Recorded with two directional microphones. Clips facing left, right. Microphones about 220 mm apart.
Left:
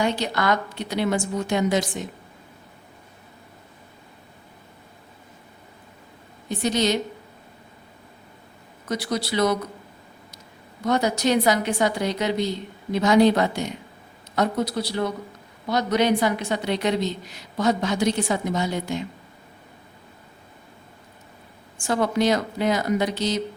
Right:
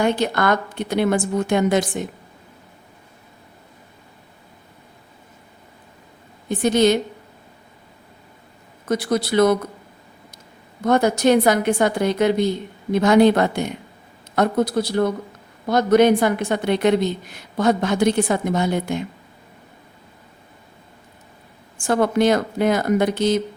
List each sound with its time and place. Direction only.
0.0 s a woman's voice: 50° right (ahead or behind)
6.5 s a woman's voice: 55° right (ahead or behind)
8.9 s a woman's voice: 50° right (ahead or behind)
10.8 s a woman's voice: 50° right (ahead or behind)
21.8 s a woman's voice: 55° right (ahead or behind)